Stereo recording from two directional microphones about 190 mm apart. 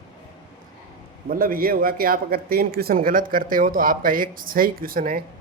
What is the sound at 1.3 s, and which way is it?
A man's voice, 50° right (ahead or behind).